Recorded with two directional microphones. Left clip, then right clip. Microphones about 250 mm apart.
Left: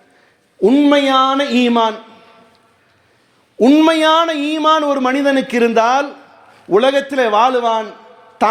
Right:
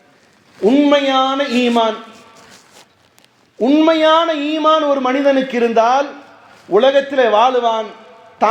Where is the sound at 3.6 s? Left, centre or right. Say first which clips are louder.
Left 1 dB; left.